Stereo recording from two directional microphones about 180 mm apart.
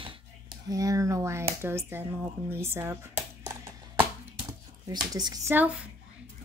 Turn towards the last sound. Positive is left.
turn(degrees=-5)  # may be behind; listen again after turning